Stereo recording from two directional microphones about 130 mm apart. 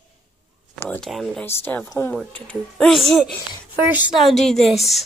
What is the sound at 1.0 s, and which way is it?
Speech, centre (ahead or behind).